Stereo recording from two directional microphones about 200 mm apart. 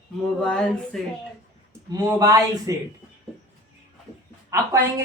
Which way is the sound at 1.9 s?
20° right (ahead or behind).